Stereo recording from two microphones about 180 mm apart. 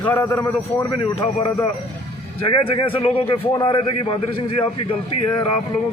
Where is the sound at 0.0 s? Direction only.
15° left (ahead or behind).